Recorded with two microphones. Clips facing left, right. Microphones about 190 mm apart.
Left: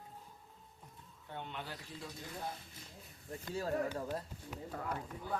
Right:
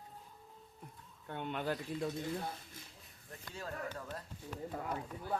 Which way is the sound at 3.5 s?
35° left (ahead or behind).